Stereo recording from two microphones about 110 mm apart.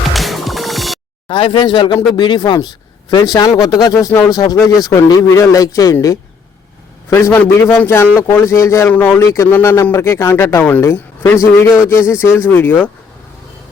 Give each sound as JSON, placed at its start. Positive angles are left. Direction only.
{"t": 0.1, "sound": "music", "side_deg": 0}
{"t": 1.3, "sound": "speech", "side_deg": 50}
{"t": 3.9, "sound": "speech", "side_deg": 25}
{"t": 7.3, "sound": "speech", "side_deg": 20}